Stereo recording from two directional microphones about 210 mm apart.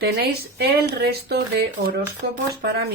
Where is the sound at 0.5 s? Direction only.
50° right (ahead or behind).